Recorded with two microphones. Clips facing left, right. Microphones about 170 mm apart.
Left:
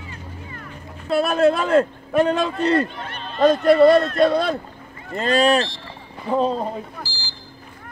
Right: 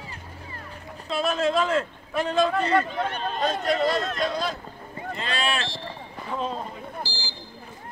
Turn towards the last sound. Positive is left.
turn(degrees=-15)  # may be behind; listen again after turning